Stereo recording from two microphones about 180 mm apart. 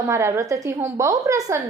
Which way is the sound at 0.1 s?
15° right (ahead or behind).